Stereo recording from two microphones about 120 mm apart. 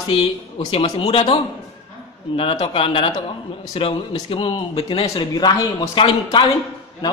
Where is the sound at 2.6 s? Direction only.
50° left (ahead or behind).